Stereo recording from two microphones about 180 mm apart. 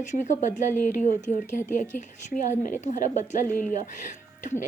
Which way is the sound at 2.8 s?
45° left (ahead or behind).